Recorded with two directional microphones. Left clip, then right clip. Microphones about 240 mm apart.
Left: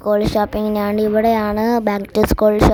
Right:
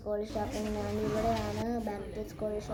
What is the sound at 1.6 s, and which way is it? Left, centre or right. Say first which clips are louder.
Speech: left 18 dB; left.